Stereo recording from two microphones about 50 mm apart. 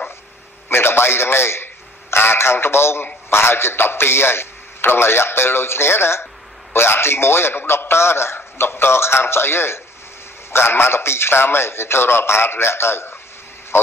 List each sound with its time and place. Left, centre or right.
0.7 s a man's voice: left